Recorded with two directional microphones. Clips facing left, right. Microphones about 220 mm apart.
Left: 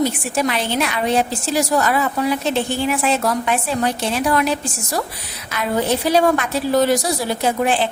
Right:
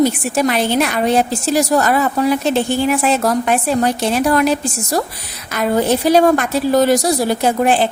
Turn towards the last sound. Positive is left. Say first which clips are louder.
# right 4 dB
turn(degrees=-45)  # may be behind; listen again after turning